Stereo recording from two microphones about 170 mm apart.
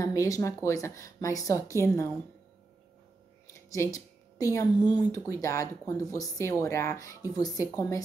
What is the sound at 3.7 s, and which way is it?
A woman's voice, 20° left (ahead or behind).